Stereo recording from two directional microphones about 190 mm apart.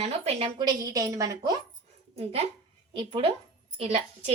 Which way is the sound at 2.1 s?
30° right (ahead or behind).